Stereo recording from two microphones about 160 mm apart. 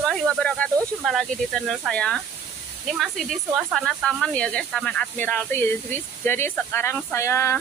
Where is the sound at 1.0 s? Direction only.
Centre (ahead or behind).